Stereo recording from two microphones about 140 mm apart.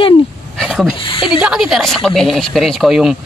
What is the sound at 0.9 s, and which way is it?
Speech, 40° left (ahead or behind).